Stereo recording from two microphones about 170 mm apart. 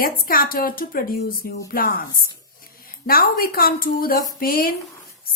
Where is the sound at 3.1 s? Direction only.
60° left (ahead or behind).